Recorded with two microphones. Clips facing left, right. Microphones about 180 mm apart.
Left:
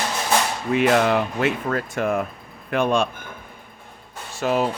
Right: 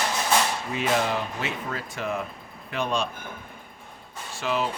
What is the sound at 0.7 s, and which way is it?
Speech, 65° left (ahead or behind).